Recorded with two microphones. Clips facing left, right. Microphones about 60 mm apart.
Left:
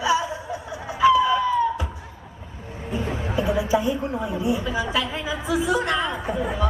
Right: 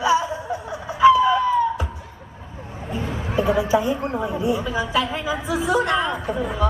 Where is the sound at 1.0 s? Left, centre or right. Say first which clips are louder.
Right 3 dB; right.